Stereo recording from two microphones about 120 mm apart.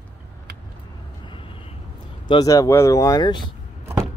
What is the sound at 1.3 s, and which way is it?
Vehicle, 45° left (ahead or behind).